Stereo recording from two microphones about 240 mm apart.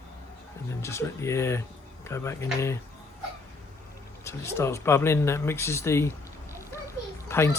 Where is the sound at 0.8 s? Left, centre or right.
Centre.